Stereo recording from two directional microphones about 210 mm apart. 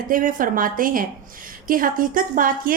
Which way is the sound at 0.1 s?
40° right (ahead or behind).